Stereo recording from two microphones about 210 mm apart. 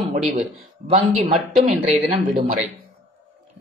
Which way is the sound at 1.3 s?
Centre (ahead or behind).